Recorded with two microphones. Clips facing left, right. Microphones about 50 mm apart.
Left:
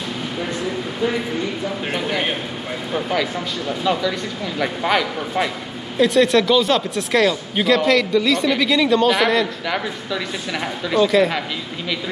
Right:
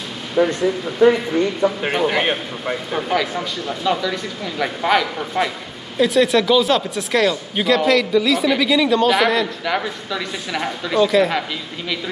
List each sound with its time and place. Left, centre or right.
1.8 s speech: centre